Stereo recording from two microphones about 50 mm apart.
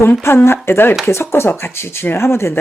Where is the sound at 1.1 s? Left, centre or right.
Left.